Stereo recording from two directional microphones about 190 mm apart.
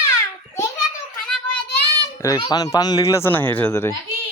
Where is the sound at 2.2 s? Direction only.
20° left (ahead or behind).